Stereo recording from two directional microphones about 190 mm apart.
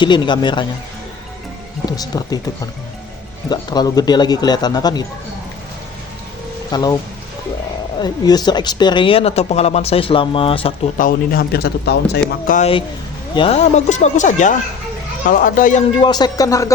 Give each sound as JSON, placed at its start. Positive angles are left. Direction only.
{"t": 0.0, "sound": "speech", "side_deg": 25}
{"t": 2.0, "sound": "speech", "side_deg": 20}
{"t": 6.7, "sound": "speech", "side_deg": 20}
{"t": 7.9, "sound": "speech", "side_deg": 20}
{"t": 10.9, "sound": "speech", "side_deg": 45}
{"t": 12.5, "sound": "speech", "side_deg": 40}
{"t": 13.3, "sound": "speech", "side_deg": 30}
{"t": 16.0, "sound": "speech", "side_deg": 20}